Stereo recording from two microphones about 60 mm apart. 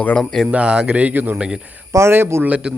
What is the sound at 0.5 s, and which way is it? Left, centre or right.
Speech, centre.